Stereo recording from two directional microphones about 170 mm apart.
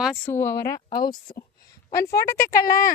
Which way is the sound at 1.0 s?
60° left (ahead or behind).